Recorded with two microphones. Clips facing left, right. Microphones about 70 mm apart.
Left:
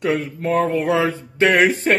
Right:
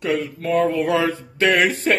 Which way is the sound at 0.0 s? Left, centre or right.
Left.